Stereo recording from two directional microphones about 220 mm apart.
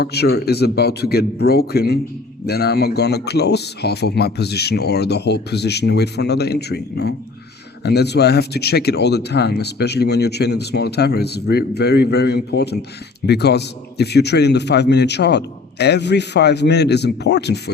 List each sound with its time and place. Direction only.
0.0 s speech: 45° left (ahead or behind)